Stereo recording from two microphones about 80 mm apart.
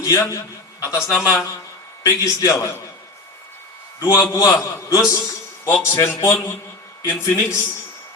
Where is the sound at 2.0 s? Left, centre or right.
Left.